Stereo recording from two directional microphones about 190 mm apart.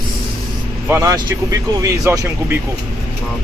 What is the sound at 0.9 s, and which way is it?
Speech, 15° right (ahead or behind).